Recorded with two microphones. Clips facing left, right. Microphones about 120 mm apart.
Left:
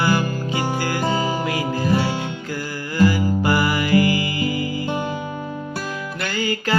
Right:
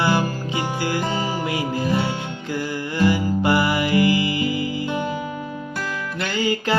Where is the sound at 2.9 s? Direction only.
25° right (ahead or behind).